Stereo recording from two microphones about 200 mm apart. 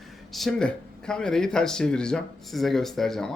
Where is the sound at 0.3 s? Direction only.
Centre (ahead or behind).